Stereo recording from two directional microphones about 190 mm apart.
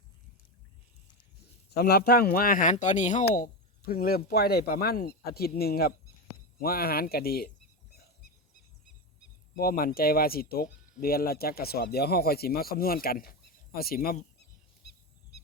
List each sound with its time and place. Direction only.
1.7 s speech: 60° left (ahead or behind)
9.6 s speech: 50° left (ahead or behind)
14.8 s a sound: 65° left (ahead or behind)